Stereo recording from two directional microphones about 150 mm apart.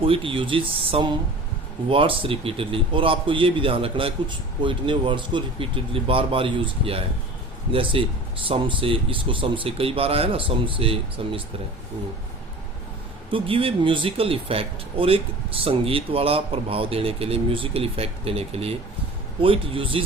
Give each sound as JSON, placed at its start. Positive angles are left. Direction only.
{"t": 0.0, "sound": "speech", "side_deg": -35}
{"t": 13.3, "sound": "speech", "side_deg": -35}